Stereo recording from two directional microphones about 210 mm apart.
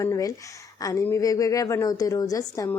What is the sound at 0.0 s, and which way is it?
Speech, 15° left (ahead or behind).